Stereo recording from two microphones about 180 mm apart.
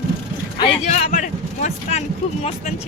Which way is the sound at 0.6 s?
35° left (ahead or behind).